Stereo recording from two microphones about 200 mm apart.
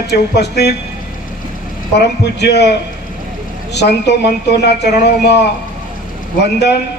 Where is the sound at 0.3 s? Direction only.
55° left (ahead or behind).